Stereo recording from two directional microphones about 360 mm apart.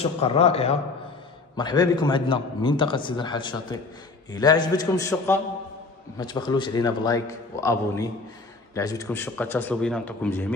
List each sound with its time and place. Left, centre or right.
0.2 s a man's voice: centre